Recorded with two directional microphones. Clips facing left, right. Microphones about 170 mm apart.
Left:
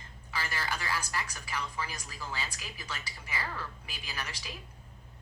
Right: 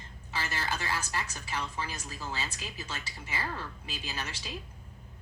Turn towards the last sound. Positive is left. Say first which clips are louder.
# right 2 dB
turn(degrees=-25)  # may be behind; listen again after turning